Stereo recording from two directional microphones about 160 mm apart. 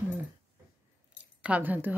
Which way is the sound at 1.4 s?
10° right (ahead or behind).